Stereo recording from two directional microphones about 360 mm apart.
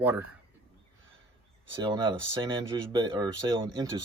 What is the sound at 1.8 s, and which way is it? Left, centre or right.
Speech, centre.